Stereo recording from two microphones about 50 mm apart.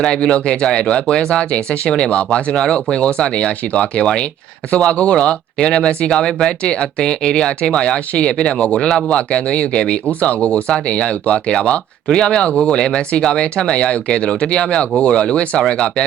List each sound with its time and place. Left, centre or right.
0.0 s speech: centre
9.3 s speech: left